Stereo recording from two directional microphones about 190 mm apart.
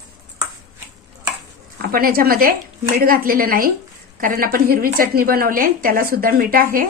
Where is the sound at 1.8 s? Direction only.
50° right (ahead or behind).